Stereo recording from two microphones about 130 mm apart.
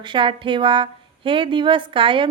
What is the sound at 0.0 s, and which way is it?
Speech, 40° right (ahead or behind).